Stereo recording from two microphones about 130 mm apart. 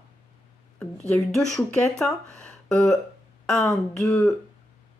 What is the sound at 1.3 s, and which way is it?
Speech, 5° left (ahead or behind).